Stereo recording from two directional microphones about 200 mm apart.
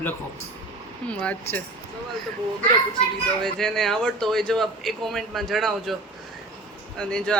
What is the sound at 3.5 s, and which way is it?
Speech, centre (ahead or behind).